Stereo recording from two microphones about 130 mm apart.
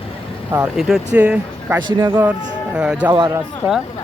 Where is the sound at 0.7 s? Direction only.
5° right (ahead or behind).